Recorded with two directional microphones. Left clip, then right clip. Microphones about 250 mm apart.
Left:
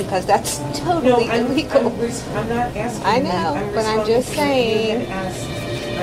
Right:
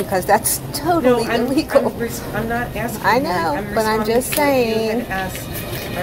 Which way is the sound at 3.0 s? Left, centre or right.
Right.